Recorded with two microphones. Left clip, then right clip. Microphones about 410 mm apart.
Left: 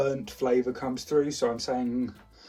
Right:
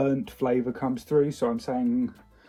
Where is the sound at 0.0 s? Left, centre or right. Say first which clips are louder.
Right 1 dB; centre.